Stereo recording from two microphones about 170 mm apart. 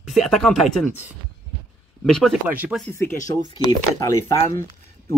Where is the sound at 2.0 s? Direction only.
5° left (ahead or behind).